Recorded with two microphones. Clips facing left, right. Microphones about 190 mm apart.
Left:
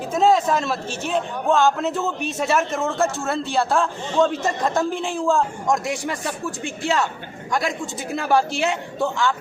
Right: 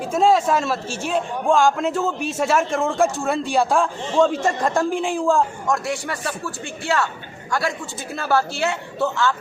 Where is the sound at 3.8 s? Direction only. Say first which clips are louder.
Right 2 dB; centre (ahead or behind).